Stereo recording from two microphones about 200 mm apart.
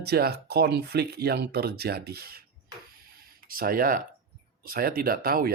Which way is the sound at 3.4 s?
45° right (ahead or behind).